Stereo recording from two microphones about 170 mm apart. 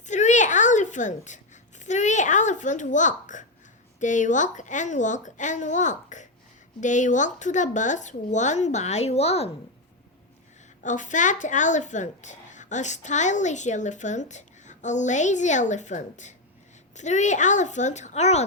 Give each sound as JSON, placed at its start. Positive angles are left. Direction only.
{"t": 0.0, "sound": "a sound", "side_deg": 45}
{"t": 1.8, "sound": "a woman's voice", "side_deg": 45}
{"t": 10.8, "sound": "a woman's voice", "side_deg": 45}